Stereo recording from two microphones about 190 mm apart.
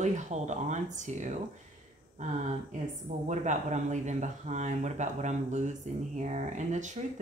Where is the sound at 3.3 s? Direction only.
40° right (ahead or behind).